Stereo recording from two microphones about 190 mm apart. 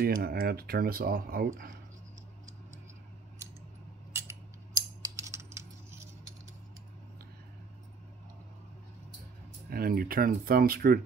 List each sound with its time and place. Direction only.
0.0 s speech: 55° right (ahead or behind)
4.1 s scissors: 15° right (ahead or behind)
9.7 s speech: 50° right (ahead or behind)